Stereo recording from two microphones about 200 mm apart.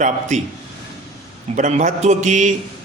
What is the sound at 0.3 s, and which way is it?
Speech, 35° right (ahead or behind).